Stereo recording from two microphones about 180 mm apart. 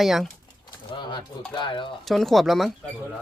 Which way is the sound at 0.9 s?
25° left (ahead or behind).